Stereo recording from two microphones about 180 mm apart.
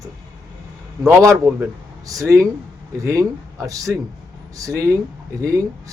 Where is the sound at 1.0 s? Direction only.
15° right (ahead or behind).